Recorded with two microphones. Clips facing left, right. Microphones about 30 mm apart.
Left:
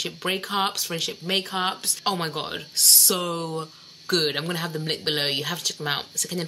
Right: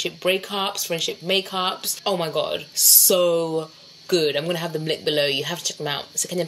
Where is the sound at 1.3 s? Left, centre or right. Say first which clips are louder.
Right 2 dB; centre.